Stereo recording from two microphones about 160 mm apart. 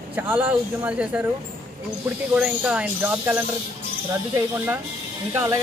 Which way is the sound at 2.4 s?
10° right (ahead or behind).